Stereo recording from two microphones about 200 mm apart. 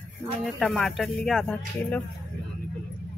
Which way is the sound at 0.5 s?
Centre (ahead or behind).